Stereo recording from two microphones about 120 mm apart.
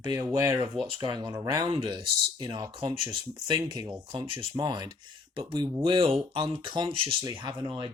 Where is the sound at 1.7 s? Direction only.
45° right (ahead or behind).